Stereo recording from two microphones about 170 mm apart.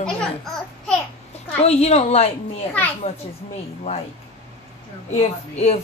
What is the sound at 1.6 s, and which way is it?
Speech, 40° left (ahead or behind).